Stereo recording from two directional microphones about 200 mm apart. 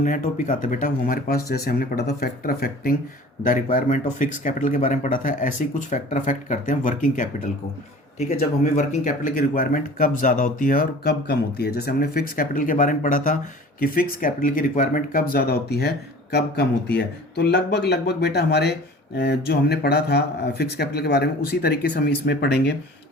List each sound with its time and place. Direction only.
0.0 s speech: 40° left (ahead or behind); by 22.7 s 60° left (ahead or behind)